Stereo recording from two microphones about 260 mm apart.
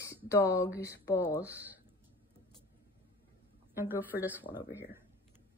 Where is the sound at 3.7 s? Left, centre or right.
Centre.